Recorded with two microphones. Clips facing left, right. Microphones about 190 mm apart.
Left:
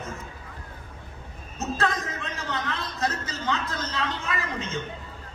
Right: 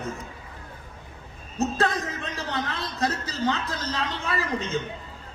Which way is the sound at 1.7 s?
35° right (ahead or behind).